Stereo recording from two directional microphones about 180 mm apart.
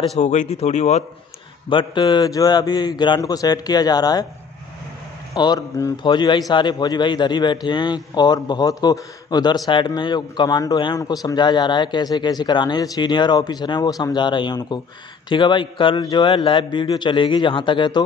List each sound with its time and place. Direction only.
0.2 s speech: 40° left (ahead or behind)
1.7 s speech: 25° left (ahead or behind)
5.3 s speech: 20° left (ahead or behind)